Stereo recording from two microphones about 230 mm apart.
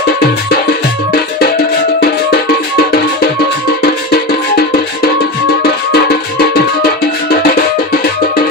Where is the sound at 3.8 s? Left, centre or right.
Left.